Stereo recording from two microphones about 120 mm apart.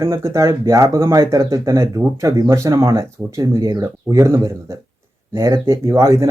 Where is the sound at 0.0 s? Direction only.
25° right (ahead or behind).